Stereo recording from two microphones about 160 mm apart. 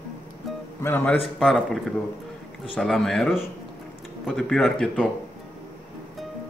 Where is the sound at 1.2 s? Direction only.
Centre (ahead or behind).